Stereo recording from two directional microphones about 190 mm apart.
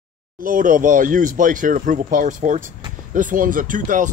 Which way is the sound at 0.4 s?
45° right (ahead or behind).